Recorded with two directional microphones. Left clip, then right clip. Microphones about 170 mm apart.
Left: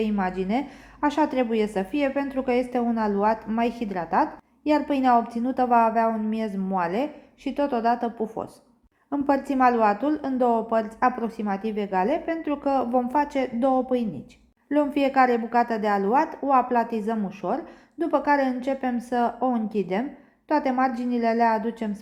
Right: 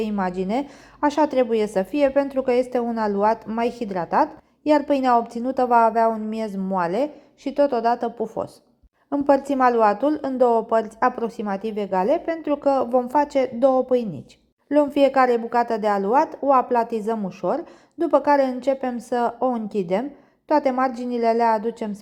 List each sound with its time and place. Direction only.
0.0 s a woman's voice: 35° right (ahead or behind)